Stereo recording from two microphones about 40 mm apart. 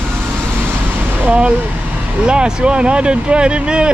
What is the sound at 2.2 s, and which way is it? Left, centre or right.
Speech, right.